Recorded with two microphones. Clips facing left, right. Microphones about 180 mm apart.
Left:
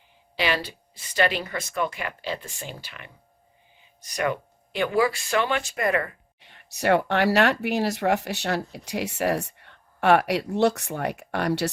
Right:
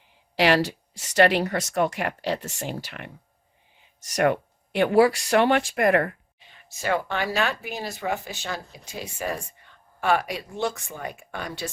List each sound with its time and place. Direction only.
0.3 s speech: 80° right; by 6.1 s 60° right (ahead or behind)
6.4 s speech: 70° left (ahead or behind)